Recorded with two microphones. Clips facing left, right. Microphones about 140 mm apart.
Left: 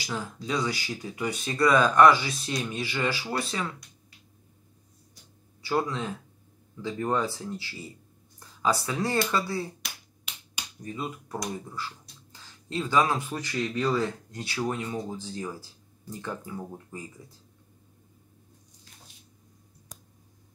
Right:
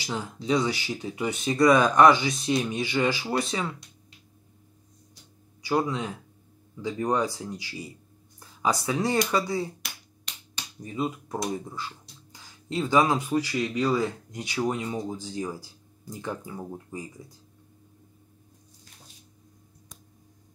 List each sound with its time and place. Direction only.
0.0 s speech: 20° right (ahead or behind)
5.6 s speech: 15° right (ahead or behind)
9.8 s finger snapping: centre (ahead or behind)
10.8 s speech: 20° right (ahead or behind)